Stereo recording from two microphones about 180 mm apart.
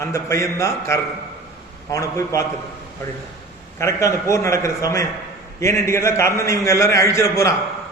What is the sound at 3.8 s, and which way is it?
A man's voice, 15° left (ahead or behind).